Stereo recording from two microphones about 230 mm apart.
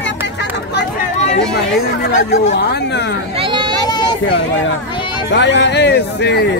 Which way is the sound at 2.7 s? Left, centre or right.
Left.